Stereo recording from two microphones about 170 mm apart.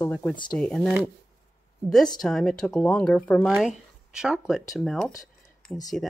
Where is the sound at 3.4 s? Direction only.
5° right (ahead or behind).